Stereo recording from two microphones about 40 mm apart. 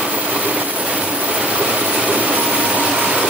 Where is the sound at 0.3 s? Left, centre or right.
Right.